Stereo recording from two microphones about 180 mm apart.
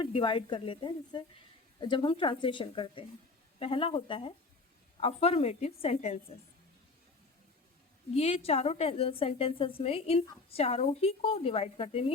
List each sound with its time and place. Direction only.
0.0 s a woman's voice: 25° left (ahead or behind)
8.1 s a woman's voice: 35° left (ahead or behind)